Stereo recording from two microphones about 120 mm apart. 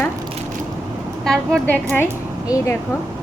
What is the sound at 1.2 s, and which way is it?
Speech, 5° left (ahead or behind).